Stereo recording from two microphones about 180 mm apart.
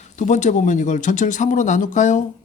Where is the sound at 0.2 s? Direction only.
40° left (ahead or behind).